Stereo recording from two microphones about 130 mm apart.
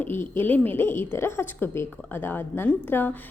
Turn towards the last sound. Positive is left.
turn(degrees=15)  # may be behind; listen again after turning